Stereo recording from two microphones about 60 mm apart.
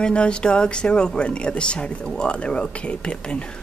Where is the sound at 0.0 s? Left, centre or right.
Centre.